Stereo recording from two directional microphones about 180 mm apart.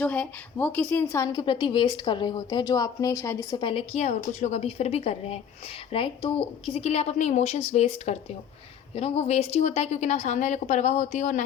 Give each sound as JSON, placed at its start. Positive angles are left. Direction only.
{"t": 0.0, "sound": "a woman's voice", "side_deg": 10}